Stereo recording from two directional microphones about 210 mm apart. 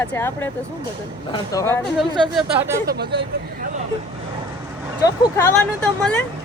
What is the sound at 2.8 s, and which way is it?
Speech, 50° right (ahead or behind).